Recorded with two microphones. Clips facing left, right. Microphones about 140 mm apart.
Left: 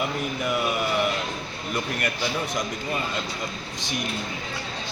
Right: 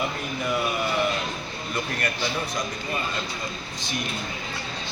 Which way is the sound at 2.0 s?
15° left (ahead or behind).